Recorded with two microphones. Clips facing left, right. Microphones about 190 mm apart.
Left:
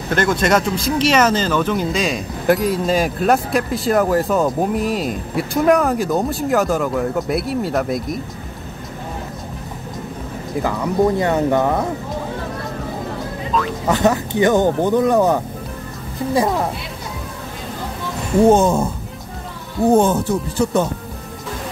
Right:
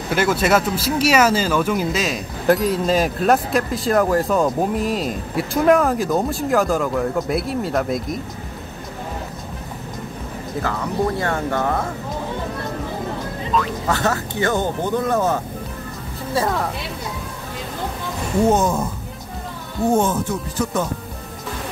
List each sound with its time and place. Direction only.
0.1 s speech: 5° right (ahead or behind)
11.1 s speech: 20° left (ahead or behind)
13.8 s speech: 20° left (ahead or behind)
18.5 s speech: 30° left (ahead or behind)
19.9 s speech: 35° left (ahead or behind)